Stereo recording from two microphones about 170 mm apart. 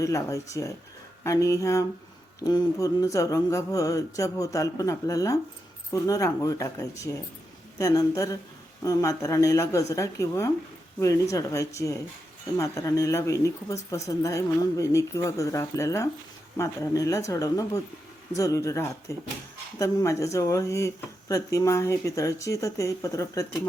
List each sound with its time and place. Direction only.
0.0 s a woman's voice: 20° left (ahead or behind)